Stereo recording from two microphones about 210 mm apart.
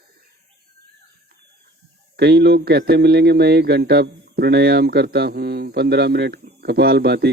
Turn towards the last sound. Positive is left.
turn(degrees=-50)  # may be behind; listen again after turning